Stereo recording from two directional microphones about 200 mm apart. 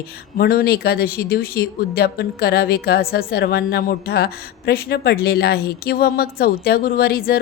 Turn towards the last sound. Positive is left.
turn(degrees=50)  # may be behind; listen again after turning